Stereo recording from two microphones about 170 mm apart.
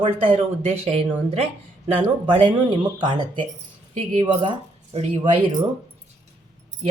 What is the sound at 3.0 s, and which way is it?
Speech, 25° right (ahead or behind).